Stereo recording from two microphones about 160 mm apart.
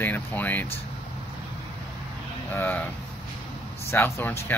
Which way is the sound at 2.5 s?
10° left (ahead or behind).